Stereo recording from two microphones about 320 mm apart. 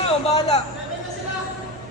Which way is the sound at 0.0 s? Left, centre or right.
Centre.